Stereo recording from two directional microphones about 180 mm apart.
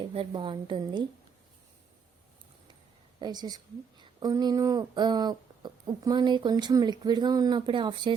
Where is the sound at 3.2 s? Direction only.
20° right (ahead or behind).